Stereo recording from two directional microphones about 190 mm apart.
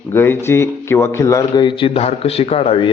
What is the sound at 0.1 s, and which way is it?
A man's voice, 10° left (ahead or behind).